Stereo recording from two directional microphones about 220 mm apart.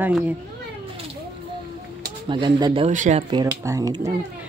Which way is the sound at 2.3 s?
20° right (ahead or behind).